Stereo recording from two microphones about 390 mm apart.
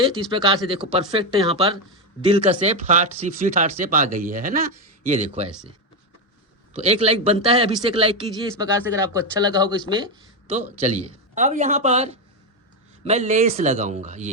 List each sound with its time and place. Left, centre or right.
0.3 s speech: centre
6.7 s speech: centre